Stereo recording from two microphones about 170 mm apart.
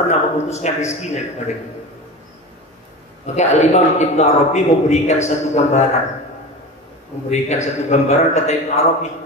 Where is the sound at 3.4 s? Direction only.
40° left (ahead or behind).